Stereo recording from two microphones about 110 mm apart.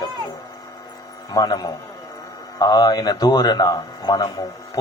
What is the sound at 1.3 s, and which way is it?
A man's voice, 35° left (ahead or behind).